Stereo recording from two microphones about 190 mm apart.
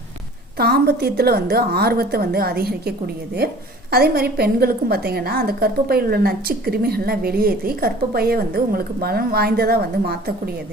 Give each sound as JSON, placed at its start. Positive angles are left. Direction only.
{"t": 0.6, "sound": "a woman's voice", "side_deg": -55}